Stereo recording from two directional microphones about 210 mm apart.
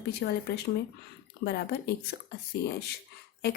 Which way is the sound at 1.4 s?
50° left (ahead or behind).